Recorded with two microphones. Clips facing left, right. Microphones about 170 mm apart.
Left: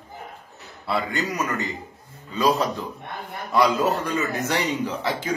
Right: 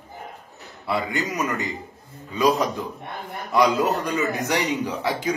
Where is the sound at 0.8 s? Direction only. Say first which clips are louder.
Even; 15° right (ahead or behind).